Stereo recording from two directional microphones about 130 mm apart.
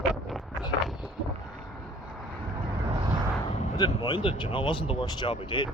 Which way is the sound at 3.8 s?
35° left (ahead or behind).